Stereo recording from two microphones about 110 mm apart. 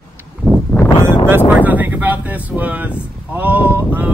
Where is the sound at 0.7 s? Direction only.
20° left (ahead or behind).